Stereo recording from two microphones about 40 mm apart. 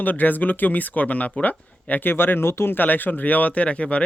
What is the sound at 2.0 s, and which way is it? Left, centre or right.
Speech, left.